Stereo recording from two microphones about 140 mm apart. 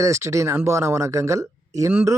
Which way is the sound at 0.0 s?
20° right (ahead or behind).